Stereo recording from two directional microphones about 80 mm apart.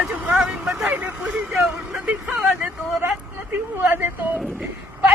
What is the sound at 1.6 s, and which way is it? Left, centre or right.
Vehicle, centre.